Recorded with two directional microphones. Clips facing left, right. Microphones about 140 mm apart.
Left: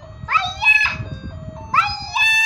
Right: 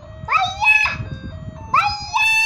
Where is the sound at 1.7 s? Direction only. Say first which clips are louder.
Right 2 dB; 30° right (ahead or behind).